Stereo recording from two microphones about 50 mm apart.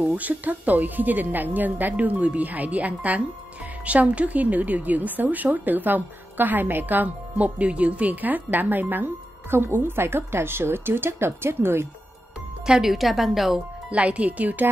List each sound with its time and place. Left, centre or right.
0.1 s a woman's voice: right
12.6 s speech: centre
12.9 s a woman's voice: centre
13.8 s speech: right